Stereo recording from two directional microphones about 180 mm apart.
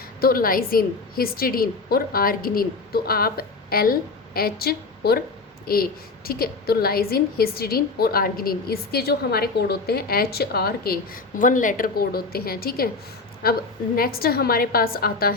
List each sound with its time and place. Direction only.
0.2 s a woman's voice: 55° left (ahead or behind)